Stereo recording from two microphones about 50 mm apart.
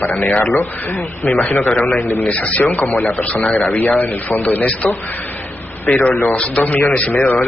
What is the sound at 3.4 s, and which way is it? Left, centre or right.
Speech, centre.